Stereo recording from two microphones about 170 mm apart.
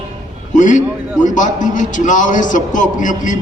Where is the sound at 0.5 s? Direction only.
45° left (ahead or behind).